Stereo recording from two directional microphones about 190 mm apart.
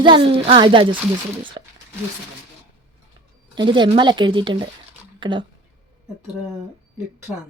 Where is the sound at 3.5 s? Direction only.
25° right (ahead or behind).